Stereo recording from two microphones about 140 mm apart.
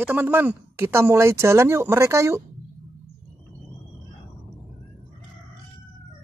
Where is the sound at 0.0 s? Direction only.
15° right (ahead or behind).